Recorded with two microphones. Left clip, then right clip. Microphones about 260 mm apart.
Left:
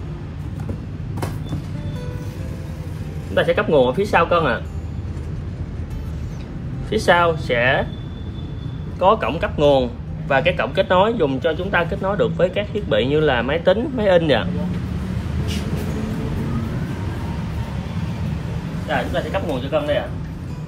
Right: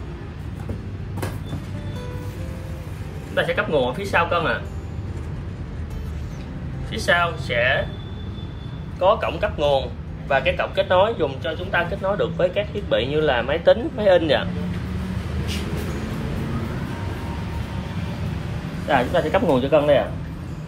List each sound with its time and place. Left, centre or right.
3.3 s speech: centre
6.9 s speech: centre
9.0 s a man's voice: left
18.9 s speech: right